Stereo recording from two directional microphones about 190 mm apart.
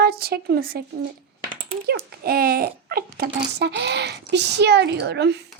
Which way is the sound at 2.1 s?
50° right (ahead or behind).